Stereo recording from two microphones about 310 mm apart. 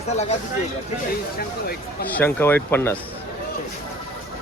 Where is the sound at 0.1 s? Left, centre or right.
Left.